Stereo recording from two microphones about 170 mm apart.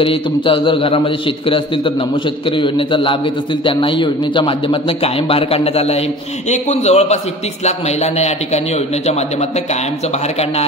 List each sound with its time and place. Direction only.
0.0 s a man's voice: 30° left (ahead or behind)